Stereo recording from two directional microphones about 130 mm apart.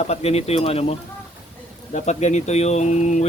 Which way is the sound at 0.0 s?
55° left (ahead or behind).